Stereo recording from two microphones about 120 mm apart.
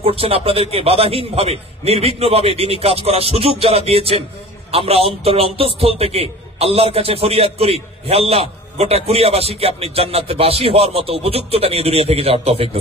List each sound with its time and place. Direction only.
0.0 s a man's voice: 50° right (ahead or behind)